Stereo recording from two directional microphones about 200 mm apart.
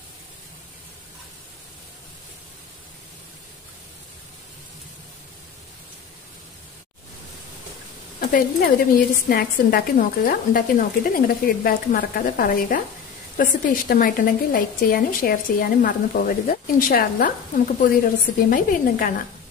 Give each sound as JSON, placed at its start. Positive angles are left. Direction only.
{"t": 8.2, "sound": "a woman's voice", "side_deg": 45}